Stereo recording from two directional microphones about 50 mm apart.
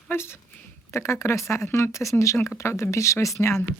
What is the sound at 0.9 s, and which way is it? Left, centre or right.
Speech, left.